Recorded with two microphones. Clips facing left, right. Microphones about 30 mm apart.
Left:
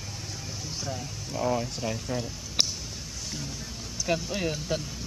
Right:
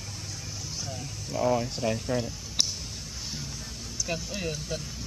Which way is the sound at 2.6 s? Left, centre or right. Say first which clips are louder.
Left 1 dB; left.